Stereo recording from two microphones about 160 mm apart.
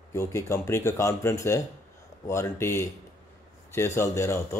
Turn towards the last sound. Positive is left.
turn(degrees=15)  # may be behind; listen again after turning